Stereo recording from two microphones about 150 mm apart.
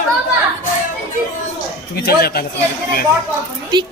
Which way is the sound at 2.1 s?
90° left.